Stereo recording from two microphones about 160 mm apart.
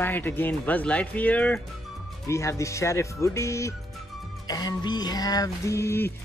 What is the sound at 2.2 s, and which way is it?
Music, 20° left (ahead or behind).